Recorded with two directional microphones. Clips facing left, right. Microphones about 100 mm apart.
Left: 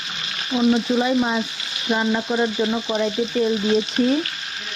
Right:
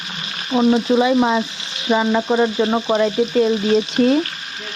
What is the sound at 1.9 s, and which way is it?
Speech, 90° right.